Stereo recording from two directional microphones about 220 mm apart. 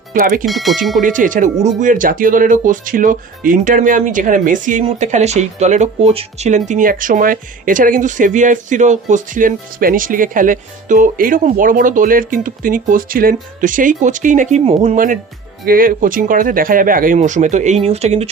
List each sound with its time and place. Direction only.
0.1 s speech: 40° right (ahead or behind)
0.4 s speech: centre (ahead or behind)
1.0 s speech: 35° right (ahead or behind)